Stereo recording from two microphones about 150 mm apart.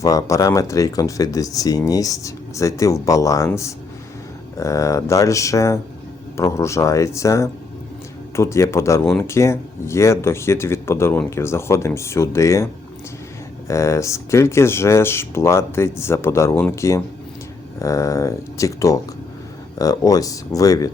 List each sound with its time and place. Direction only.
0.0 s speech: 20° left (ahead or behind)
13.7 s speech: 20° left (ahead or behind)